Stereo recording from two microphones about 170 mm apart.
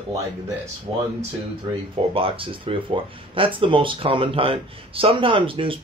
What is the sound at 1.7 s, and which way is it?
Speech, 25° right (ahead or behind).